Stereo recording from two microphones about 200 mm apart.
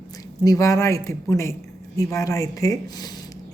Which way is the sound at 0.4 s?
15° left (ahead or behind).